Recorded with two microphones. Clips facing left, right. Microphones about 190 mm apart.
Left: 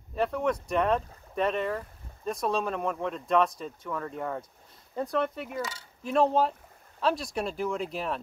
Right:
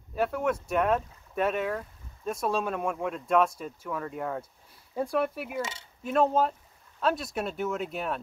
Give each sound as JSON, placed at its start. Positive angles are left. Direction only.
{"t": 0.1, "sound": "speech", "side_deg": -5}
{"t": 5.6, "sound": "speech", "side_deg": -25}
{"t": 6.0, "sound": "speech", "side_deg": 0}